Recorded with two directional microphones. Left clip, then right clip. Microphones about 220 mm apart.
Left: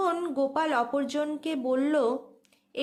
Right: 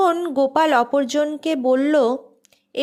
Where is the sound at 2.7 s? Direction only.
30° right (ahead or behind).